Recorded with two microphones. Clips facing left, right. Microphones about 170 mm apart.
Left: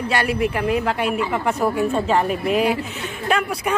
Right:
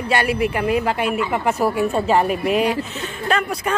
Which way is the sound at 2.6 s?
10° left (ahead or behind).